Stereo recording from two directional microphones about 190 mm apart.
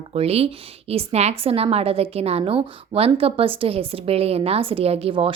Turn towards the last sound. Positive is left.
turn(degrees=-30)  # may be behind; listen again after turning